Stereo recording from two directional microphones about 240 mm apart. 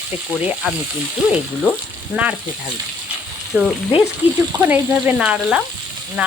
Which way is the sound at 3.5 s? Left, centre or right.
Centre.